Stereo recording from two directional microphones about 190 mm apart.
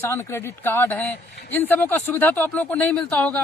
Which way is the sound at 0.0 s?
15° left (ahead or behind).